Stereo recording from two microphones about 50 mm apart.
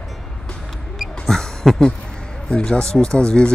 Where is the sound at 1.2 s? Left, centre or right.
Centre.